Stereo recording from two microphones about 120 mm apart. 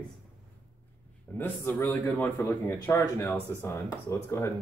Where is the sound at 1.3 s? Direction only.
20° left (ahead or behind).